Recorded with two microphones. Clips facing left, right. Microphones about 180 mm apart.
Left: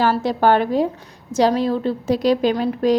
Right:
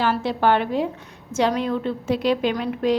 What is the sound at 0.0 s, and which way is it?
A woman's voice, 40° left (ahead or behind).